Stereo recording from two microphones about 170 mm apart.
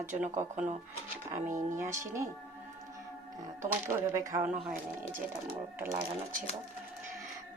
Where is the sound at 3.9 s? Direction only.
15° right (ahead or behind).